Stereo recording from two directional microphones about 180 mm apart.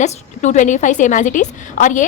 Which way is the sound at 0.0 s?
40° left (ahead or behind).